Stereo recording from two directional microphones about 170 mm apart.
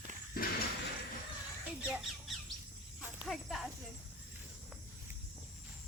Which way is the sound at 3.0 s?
5° right (ahead or behind).